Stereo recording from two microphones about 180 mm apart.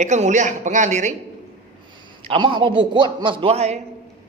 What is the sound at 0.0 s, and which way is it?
A woman's voice, 40° right (ahead or behind).